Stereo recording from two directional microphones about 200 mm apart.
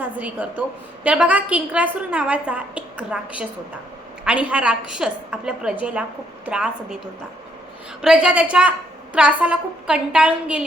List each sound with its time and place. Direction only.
0.0 s a woman's voice: 5° right (ahead or behind)